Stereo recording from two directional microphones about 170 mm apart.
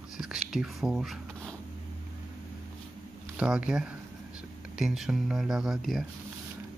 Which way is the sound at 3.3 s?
5° right (ahead or behind).